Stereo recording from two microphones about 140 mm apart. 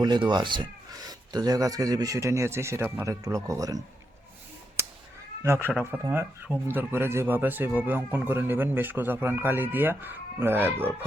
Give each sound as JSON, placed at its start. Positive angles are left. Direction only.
{"t": 0.0, "sound": "speech", "side_deg": -35}
{"t": 5.4, "sound": "speech", "side_deg": -20}